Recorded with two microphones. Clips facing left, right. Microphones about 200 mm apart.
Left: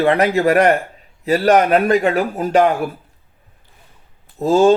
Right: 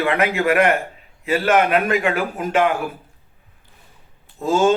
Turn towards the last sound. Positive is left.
turn(degrees=35)  # may be behind; listen again after turning